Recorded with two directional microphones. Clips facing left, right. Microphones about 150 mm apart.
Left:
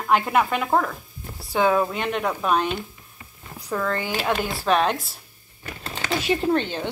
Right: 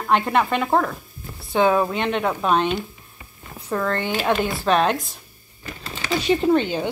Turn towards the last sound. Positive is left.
turn(degrees=-10)  # may be behind; listen again after turning